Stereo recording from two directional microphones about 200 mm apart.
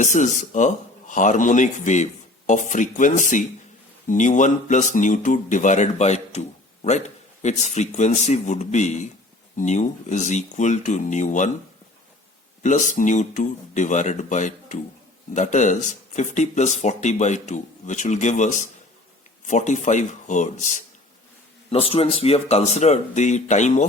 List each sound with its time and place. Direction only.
0.0 s speech: 40° left (ahead or behind)
7.4 s speech: 35° left (ahead or behind)
12.6 s speech: 40° left (ahead or behind)